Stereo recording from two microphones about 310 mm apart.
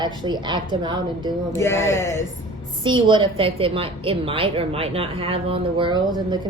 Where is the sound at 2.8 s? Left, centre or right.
Centre.